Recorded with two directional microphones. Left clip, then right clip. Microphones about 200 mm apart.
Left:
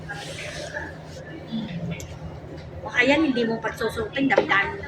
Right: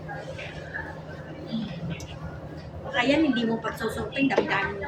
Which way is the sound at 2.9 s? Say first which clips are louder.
Left 3 dB; 15° right (ahead or behind).